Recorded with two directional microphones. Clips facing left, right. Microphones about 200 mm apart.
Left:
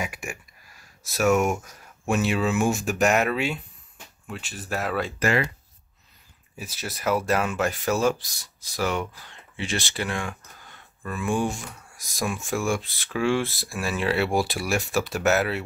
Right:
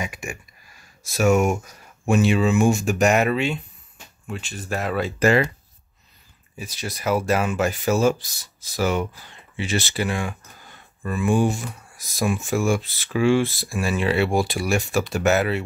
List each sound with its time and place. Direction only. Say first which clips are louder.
0.0 s speech: right 1 dB; 5° left (ahead or behind)
5.2 s speech: right 6 dB; 30° right (ahead or behind)
6.5 s speech: right 3 dB; 5° left (ahead or behind)